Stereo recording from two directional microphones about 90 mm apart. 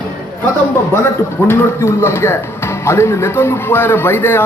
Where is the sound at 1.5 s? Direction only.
30° left (ahead or behind).